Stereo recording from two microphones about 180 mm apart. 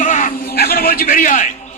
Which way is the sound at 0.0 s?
45° left (ahead or behind).